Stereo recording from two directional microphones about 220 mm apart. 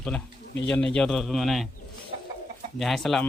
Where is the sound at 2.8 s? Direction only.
Centre (ahead or behind).